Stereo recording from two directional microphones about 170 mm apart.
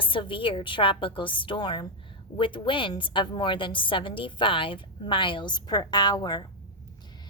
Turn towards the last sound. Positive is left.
turn(degrees=25)  # may be behind; listen again after turning